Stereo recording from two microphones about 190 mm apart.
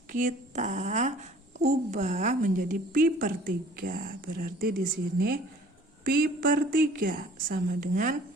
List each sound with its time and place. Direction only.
0.1 s a child's voice: 40° right (ahead or behind)